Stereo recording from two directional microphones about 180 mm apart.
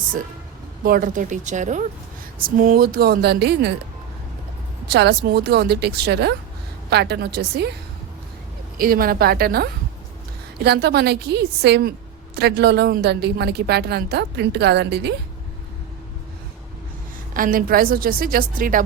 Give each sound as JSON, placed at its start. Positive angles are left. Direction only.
{"t": 0.9, "sound": "a woman's voice", "side_deg": -50}
{"t": 4.9, "sound": "a woman's voice", "side_deg": -65}
{"t": 8.8, "sound": "a woman's voice", "side_deg": -55}
{"t": 17.3, "sound": "a woman's voice", "side_deg": -50}